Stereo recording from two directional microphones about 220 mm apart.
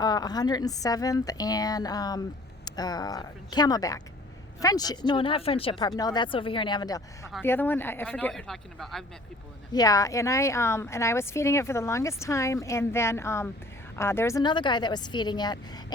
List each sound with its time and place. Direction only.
0.0 s a woman's voice: 20° left (ahead or behind); by 9.0 s centre (ahead or behind)
9.7 s a woman's voice: 15° left (ahead or behind)